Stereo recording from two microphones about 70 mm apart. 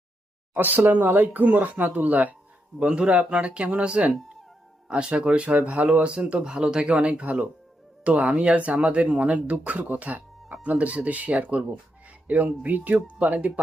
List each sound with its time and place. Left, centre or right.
0.5 s speech: right